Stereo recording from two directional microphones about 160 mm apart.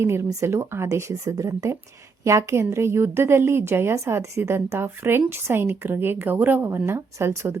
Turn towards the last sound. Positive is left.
turn(degrees=-15)  # may be behind; listen again after turning